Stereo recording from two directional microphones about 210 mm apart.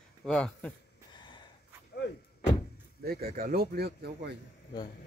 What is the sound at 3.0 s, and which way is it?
Speech, 45° right (ahead or behind).